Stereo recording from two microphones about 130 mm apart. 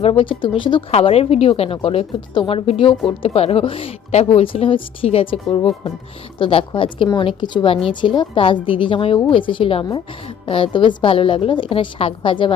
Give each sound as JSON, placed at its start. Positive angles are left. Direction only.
{"t": 0.0, "sound": "a woman's voice", "side_deg": 45}